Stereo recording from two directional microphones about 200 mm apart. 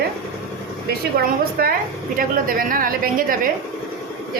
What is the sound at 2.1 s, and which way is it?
A woman's voice, 45° right (ahead or behind).